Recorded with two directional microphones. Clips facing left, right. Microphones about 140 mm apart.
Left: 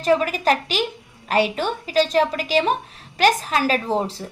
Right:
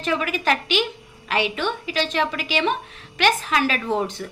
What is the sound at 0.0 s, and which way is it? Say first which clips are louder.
A woman's voice: left 5 dB; 35° left (ahead or behind).